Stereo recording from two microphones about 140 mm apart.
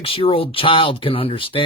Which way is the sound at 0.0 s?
40° left (ahead or behind).